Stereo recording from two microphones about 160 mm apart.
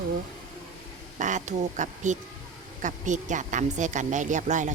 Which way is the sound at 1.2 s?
50° right (ahead or behind).